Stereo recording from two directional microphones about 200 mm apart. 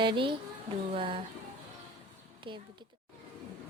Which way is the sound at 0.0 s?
25° right (ahead or behind).